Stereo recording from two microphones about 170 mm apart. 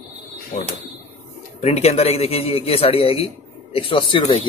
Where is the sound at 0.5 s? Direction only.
45° left (ahead or behind).